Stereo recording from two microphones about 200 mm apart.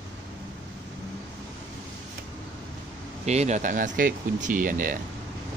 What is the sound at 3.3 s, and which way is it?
Speech, 35° right (ahead or behind).